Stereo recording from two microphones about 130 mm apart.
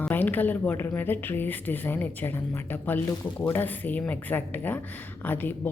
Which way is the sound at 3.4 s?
15° left (ahead or behind).